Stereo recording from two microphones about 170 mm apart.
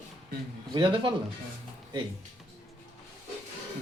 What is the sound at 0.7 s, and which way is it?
Speech, 30° right (ahead or behind).